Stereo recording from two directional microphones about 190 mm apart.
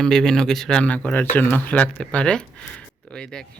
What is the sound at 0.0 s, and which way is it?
Speech, 5° left (ahead or behind).